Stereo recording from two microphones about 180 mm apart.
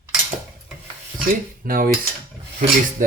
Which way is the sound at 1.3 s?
50° right (ahead or behind).